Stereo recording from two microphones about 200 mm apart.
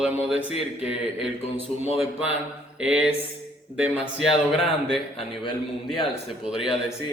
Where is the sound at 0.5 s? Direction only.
30° left (ahead or behind).